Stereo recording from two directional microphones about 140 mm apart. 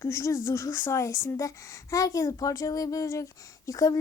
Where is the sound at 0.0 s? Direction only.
20° left (ahead or behind).